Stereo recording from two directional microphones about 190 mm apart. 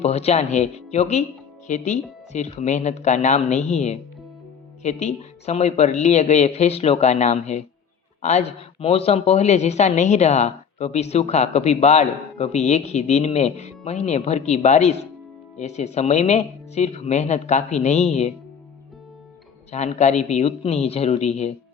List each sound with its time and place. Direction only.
0.0 s speech: 35° left (ahead or behind)
19.7 s speech: 35° left (ahead or behind)